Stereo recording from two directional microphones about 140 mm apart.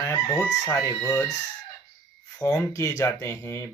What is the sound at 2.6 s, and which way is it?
Speech, 20° left (ahead or behind).